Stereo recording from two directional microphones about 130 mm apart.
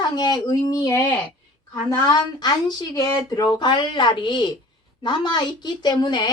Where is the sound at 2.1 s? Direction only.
35° left (ahead or behind).